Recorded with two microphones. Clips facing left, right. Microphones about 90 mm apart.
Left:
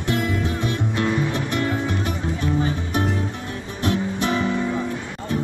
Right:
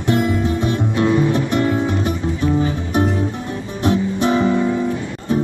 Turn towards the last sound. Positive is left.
turn(degrees=-25)  # may be behind; listen again after turning